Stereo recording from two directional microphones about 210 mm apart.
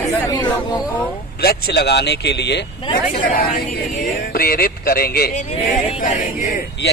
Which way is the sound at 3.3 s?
40° left (ahead or behind).